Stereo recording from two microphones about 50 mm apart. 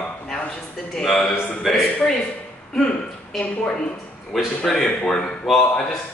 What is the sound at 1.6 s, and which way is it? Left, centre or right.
Speech, centre.